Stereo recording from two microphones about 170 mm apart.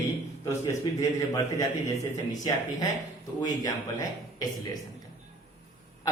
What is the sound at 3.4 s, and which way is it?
A man's voice, 20° left (ahead or behind).